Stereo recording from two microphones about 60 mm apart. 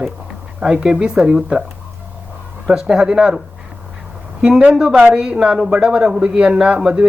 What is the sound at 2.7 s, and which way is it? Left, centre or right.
Speech, centre.